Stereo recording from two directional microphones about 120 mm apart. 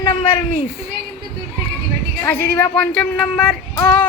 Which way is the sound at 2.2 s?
15° left (ahead or behind).